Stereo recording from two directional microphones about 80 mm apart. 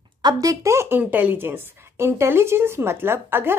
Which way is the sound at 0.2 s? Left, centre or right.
Right.